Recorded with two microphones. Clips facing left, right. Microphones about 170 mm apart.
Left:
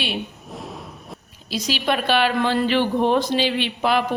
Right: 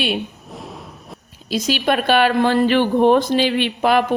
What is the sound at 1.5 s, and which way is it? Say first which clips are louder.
Speech: right 4 dB; 50° right (ahead or behind).